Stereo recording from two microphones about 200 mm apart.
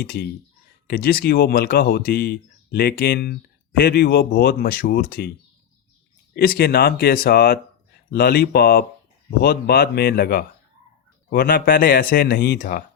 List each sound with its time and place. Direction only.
0.0 s speech: 50° left (ahead or behind)
6.3 s speech: 50° left (ahead or behind)